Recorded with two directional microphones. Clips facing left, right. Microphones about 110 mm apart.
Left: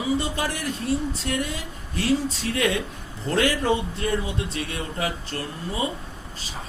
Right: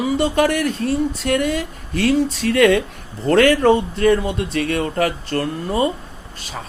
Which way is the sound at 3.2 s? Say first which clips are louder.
Right 9 dB; 70° right (ahead or behind).